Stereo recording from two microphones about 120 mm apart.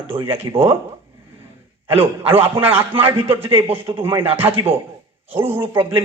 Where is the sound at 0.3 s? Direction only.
50° right (ahead or behind).